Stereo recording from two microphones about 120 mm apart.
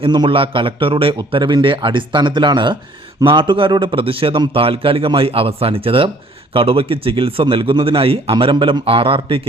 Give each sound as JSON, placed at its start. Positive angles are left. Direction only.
{"t": 0.0, "sound": "a man's voice", "side_deg": -45}